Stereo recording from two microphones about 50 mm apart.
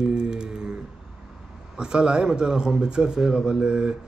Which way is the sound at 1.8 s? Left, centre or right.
Centre.